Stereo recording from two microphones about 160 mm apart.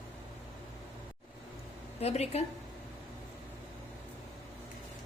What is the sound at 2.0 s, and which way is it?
Speech, 40° left (ahead or behind).